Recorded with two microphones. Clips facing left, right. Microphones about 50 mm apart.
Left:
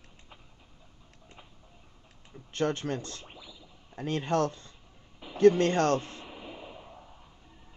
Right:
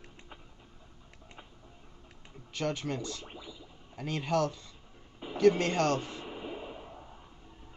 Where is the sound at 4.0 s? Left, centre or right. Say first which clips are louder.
Left 2 dB; left.